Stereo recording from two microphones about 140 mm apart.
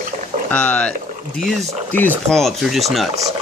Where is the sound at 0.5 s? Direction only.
10° left (ahead or behind).